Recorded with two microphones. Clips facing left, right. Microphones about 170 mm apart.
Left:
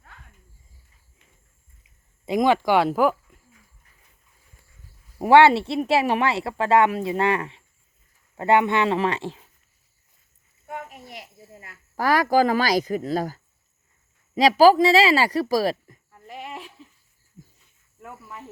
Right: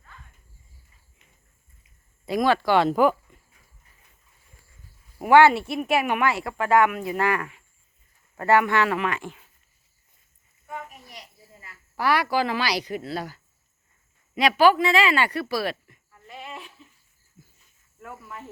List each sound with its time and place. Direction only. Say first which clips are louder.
2.2 s speech: left 2 dB; 20° left (ahead or behind); by 3.2 s 5° left (ahead or behind)
5.2 s speech: left 1 dB; 30° left (ahead or behind)
10.7 s a sound: left 2 dB; 65° left (ahead or behind)
11.9 s a woman's voice: left 4 dB; 45° left (ahead or behind)
16.3 s goat: left 3 dB; 15° left (ahead or behind)
18.0 s cricket: even; 20° left (ahead or behind)